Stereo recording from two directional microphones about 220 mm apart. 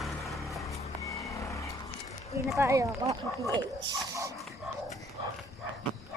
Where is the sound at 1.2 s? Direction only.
15° left (ahead or behind).